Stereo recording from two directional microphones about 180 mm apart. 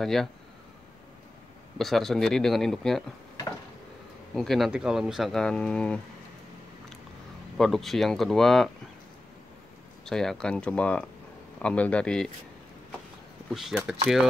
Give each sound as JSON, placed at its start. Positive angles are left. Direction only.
{"t": 0.0, "sound": "speech", "side_deg": 0}
{"t": 1.8, "sound": "speech", "side_deg": 0}
{"t": 4.4, "sound": "speech", "side_deg": 0}
{"t": 7.5, "sound": "speech", "side_deg": 0}
{"t": 10.0, "sound": "speech", "side_deg": 5}
{"t": 13.5, "sound": "speech", "side_deg": 0}